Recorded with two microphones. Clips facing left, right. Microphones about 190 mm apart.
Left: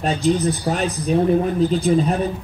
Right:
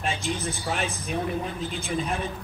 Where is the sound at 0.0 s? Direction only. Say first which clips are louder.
Left 11 dB; 40° left (ahead or behind).